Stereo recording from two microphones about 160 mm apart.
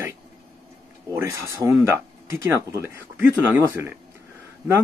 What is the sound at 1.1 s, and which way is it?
Speech, 15° right (ahead or behind).